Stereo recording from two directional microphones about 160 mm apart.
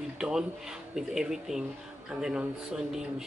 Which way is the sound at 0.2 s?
5° right (ahead or behind).